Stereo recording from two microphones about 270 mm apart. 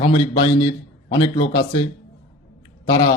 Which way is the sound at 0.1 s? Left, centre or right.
Centre.